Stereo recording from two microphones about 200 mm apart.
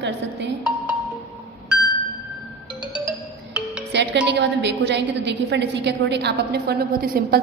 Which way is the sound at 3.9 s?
60° right (ahead or behind).